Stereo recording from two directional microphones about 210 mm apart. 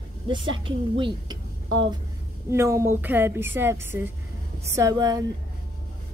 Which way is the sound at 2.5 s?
15° right (ahead or behind).